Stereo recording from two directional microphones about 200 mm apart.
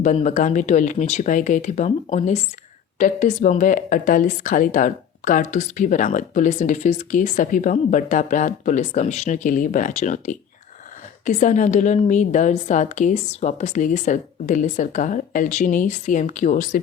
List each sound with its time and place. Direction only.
0.0 s speech: 35° left (ahead or behind)